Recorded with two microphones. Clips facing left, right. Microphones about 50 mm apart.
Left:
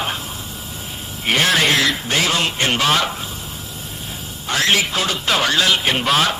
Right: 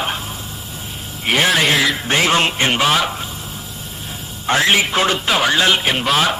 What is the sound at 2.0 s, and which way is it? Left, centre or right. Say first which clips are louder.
Music: right 3 dB; right.